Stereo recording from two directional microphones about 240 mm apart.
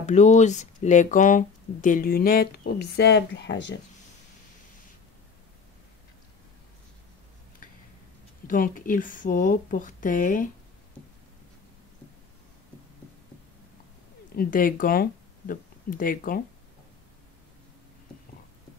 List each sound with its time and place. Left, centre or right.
0.0 s speech: left
8.5 s speech: left
14.3 s speech: left